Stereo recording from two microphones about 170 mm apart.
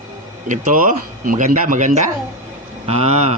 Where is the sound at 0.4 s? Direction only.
50° right (ahead or behind).